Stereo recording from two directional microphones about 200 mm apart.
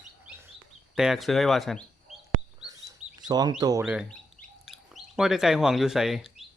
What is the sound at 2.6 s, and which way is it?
Bird, 20° right (ahead or behind).